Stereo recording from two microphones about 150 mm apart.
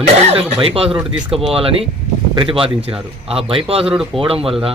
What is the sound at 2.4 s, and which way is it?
Speech, 35° right (ahead or behind).